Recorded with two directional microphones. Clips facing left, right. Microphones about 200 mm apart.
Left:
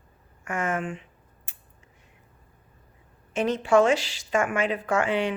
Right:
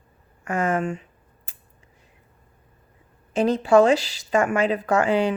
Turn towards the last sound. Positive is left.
turn(degrees=-40)  # may be behind; listen again after turning